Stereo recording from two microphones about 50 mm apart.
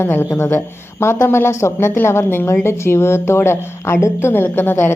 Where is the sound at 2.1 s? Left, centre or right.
Left.